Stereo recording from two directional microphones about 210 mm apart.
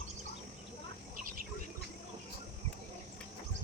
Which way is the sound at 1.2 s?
40° right (ahead or behind).